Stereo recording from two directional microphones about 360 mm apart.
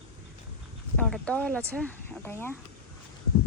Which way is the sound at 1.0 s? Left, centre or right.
Centre.